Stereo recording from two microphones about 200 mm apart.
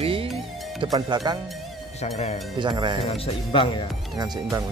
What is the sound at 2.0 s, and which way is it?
Speech, 35° left (ahead or behind).